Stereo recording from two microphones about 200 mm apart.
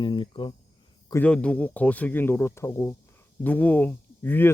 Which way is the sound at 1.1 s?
5° left (ahead or behind).